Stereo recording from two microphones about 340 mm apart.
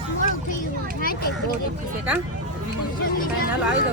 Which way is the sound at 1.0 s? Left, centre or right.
Left.